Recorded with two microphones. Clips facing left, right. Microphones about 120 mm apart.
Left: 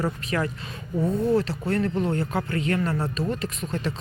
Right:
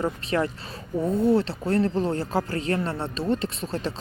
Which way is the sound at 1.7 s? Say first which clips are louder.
Right 2 dB; 30° right (ahead or behind).